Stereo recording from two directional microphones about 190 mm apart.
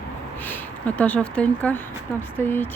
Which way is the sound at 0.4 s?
10° left (ahead or behind).